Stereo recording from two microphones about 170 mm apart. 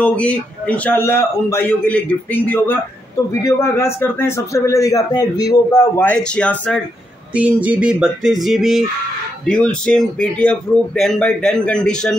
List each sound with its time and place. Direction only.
0.0 s a man's voice: 5° left (ahead or behind)
7.3 s a man's voice: 10° right (ahead or behind)